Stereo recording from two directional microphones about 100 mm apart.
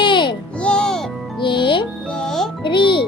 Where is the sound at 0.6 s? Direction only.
10° left (ahead or behind).